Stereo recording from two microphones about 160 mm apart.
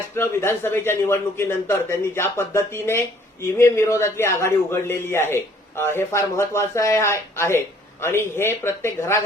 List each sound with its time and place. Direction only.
0.2 s a man's voice: 15° left (ahead or behind)